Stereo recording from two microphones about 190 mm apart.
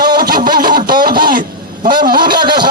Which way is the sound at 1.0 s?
50° right (ahead or behind).